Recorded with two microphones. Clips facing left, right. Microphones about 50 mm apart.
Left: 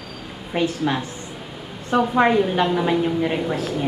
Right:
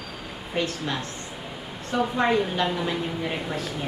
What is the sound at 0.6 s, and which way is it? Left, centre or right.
A woman's voice, centre.